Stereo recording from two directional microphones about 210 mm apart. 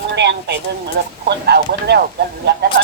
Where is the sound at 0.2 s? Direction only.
55° right (ahead or behind).